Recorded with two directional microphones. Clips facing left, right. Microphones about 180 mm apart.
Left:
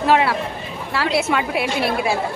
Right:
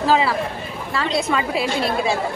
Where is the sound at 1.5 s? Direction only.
60° left (ahead or behind).